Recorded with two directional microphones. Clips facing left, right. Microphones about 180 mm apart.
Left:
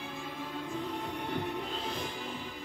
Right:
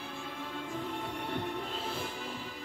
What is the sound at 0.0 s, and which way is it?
Music, 5° left (ahead or behind).